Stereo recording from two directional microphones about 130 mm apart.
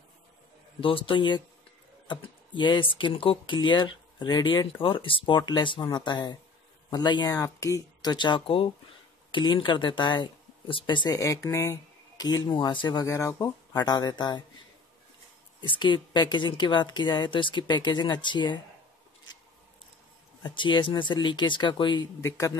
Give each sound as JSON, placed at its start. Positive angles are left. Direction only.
{"t": 0.7, "sound": "speech", "side_deg": 45}
{"t": 13.0, "sound": "speech", "side_deg": 20}
{"t": 15.6, "sound": "speech", "side_deg": 40}
{"t": 20.4, "sound": "speech", "side_deg": 35}
{"t": 22.2, "sound": "speech", "side_deg": 25}